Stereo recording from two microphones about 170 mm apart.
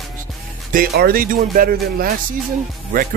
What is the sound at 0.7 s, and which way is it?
Speech, 60° right (ahead or behind).